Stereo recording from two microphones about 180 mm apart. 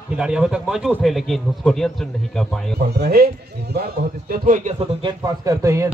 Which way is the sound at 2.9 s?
60° right (ahead or behind).